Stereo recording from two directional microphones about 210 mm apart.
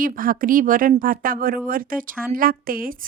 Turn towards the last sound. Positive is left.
turn(degrees=-40)  # may be behind; listen again after turning